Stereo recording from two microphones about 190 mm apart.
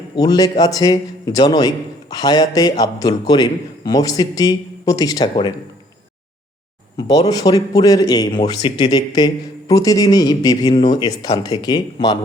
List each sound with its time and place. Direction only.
0.2 s a man's voice: 20° left (ahead or behind)
6.9 s a man's voice: 20° left (ahead or behind)